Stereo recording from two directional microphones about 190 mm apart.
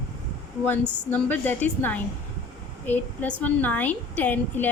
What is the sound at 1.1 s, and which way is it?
A woman's voice, 10° left (ahead or behind).